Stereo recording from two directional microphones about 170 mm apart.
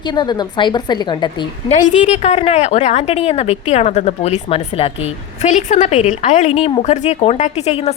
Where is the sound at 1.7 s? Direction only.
40° left (ahead or behind).